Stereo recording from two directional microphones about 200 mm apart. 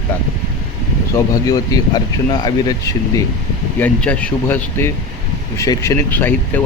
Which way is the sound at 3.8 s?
10° left (ahead or behind).